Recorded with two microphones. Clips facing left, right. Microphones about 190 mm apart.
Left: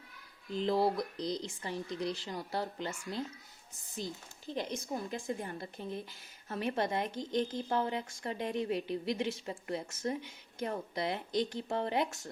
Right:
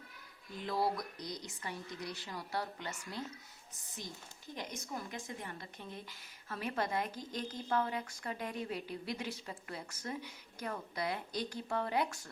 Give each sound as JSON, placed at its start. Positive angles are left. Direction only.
{"t": 0.6, "sound": "speech", "side_deg": 25}
{"t": 4.5, "sound": "speech", "side_deg": 30}